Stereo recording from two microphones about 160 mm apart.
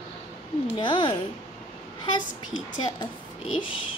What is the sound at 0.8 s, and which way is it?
Speech, 30° left (ahead or behind).